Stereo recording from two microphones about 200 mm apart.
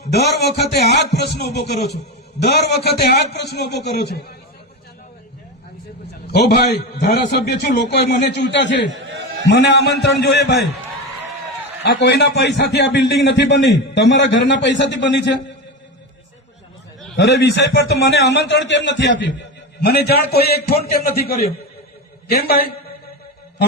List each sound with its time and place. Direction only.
0.3 s a man's voice: 55° left (ahead or behind)
6.3 s a man's voice: 55° left (ahead or behind)
11.8 s a man's voice: 60° left (ahead or behind)
17.2 s a man's voice: 60° left (ahead or behind)